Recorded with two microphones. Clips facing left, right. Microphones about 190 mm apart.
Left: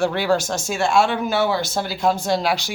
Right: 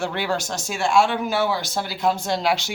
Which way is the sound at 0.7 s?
15° right (ahead or behind).